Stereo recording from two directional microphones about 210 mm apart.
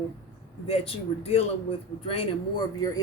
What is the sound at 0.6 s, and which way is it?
A man's voice, 30° left (ahead or behind).